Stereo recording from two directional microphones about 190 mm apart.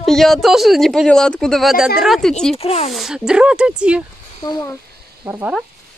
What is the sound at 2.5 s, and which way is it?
Speech, 30° left (ahead or behind).